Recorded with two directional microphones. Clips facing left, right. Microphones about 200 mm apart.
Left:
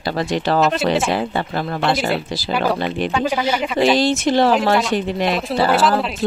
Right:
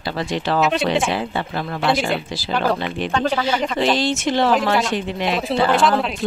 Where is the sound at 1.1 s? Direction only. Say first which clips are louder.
Left 3 dB; 40° left (ahead or behind).